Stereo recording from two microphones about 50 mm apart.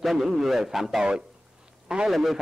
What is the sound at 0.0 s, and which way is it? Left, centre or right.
A man's voice, centre.